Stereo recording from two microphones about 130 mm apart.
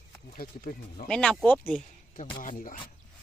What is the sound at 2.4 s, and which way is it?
Speech, 90° left.